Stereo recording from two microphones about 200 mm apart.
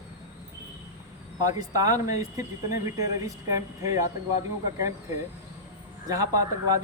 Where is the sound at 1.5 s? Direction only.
15° right (ahead or behind).